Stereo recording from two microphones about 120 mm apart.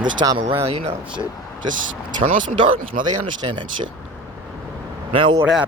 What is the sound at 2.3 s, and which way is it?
Speech, 90° right.